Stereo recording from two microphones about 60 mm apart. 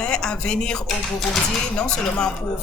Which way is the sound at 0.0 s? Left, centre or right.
Centre.